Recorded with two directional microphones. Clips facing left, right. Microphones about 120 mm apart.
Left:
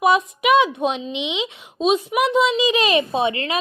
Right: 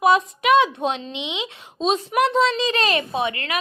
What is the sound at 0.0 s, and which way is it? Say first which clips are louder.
A woman's voice: even; 15° left (ahead or behind).